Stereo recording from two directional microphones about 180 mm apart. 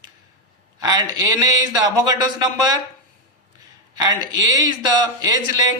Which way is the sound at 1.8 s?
20° right (ahead or behind).